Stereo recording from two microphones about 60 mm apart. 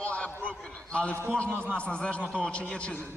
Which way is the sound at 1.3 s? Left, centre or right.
Centre.